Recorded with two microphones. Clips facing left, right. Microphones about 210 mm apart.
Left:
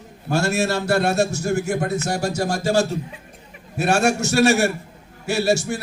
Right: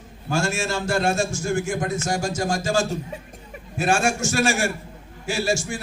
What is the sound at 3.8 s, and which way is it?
A man's voice, 65° left (ahead or behind).